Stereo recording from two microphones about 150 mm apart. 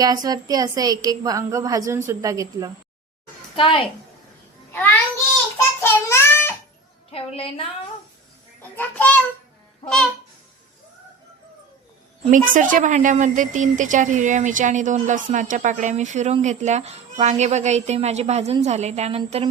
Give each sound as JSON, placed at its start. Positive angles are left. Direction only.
{"t": 0.0, "sound": "a woman's voice", "side_deg": -25}
{"t": 3.5, "sound": "a child's voice", "side_deg": 35}
{"t": 5.8, "sound": "a sound", "side_deg": 15}
{"t": 7.1, "sound": "a woman's voice", "side_deg": 40}
{"t": 8.7, "sound": "a child's voice", "side_deg": 10}
{"t": 9.8, "sound": "babbling", "side_deg": 5}
{"t": 12.3, "sound": "a woman's voice", "side_deg": -60}